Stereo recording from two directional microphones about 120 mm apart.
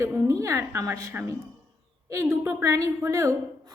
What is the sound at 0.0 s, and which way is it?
A woman's voice, 25° right (ahead or behind).